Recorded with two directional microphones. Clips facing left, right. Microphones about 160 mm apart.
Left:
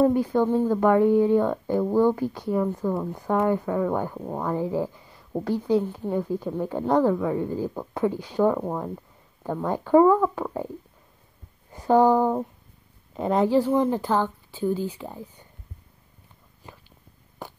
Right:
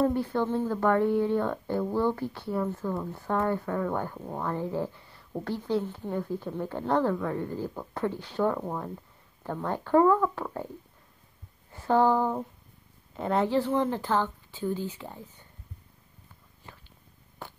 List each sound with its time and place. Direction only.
0.0 s speech: 15° left (ahead or behind)
11.7 s speech: 15° left (ahead or behind)
17.4 s a sound: 15° left (ahead or behind)